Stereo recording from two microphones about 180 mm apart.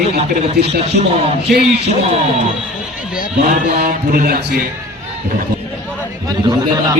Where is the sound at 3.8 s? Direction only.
50° right (ahead or behind).